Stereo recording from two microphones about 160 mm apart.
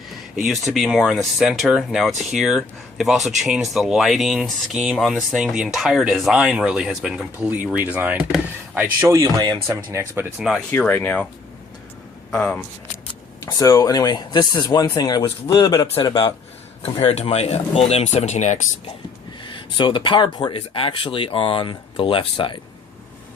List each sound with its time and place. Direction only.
0.3 s speech: centre (ahead or behind); by 10.2 s 15° right (ahead or behind)
10.3 s speech: 5° right (ahead or behind)
10.7 s speech: 10° left (ahead or behind)
12.3 s speech: 5° left (ahead or behind)
13.4 s speech: 20° left (ahead or behind)
16.8 s speech: 40° left (ahead or behind)
19.4 s speech: 30° left (ahead or behind)